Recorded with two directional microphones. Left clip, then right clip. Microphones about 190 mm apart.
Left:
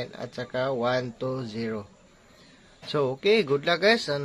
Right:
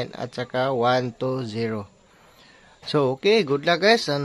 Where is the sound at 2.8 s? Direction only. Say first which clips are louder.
Right 4 dB; 40° right (ahead or behind).